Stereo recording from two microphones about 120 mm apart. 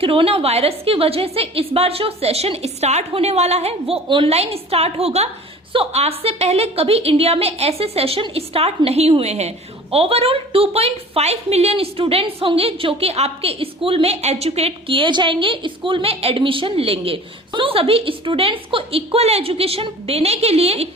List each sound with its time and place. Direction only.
0.0 s a woman's voice: 50° right (ahead or behind)